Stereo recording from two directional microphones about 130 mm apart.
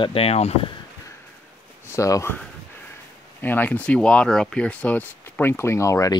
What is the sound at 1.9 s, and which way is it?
Speech, 25° left (ahead or behind).